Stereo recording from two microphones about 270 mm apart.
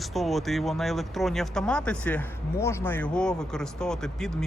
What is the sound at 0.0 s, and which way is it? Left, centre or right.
Speech, centre.